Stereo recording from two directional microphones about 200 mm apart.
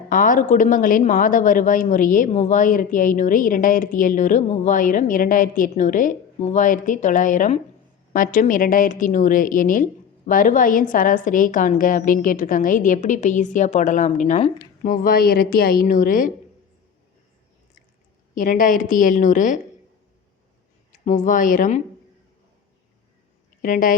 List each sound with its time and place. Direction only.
0.1 s a woman's voice: 40° left (ahead or behind)
18.3 s a woman's voice: 40° left (ahead or behind)
21.0 s a woman's voice: 40° left (ahead or behind)
23.6 s a woman's voice: 40° left (ahead or behind)